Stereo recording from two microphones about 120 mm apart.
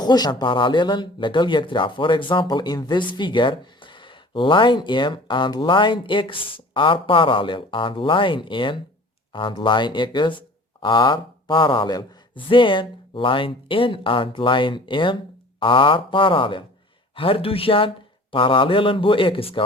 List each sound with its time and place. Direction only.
0.0 s speech: 35° left (ahead or behind)